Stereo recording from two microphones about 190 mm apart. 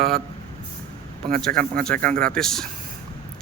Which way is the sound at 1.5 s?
50° right (ahead or behind).